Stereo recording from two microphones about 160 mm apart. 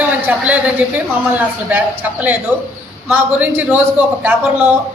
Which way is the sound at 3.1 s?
10° right (ahead or behind).